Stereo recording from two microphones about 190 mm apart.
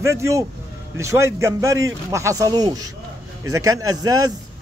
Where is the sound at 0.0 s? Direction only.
15° right (ahead or behind).